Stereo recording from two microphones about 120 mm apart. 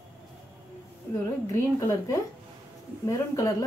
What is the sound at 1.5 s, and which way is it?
A woman's voice, 25° left (ahead or behind).